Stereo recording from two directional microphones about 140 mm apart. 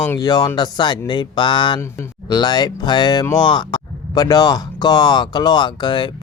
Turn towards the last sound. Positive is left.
turn(degrees=30)  # may be behind; listen again after turning